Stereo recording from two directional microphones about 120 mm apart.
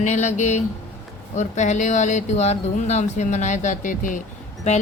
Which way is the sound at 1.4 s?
85° left.